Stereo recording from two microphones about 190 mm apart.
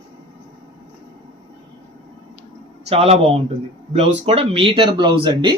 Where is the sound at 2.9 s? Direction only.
35° right (ahead or behind).